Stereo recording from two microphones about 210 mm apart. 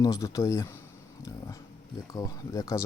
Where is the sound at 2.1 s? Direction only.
15° left (ahead or behind).